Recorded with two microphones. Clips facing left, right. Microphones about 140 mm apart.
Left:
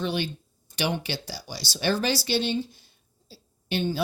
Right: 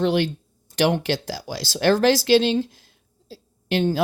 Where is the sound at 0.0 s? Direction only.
90° right.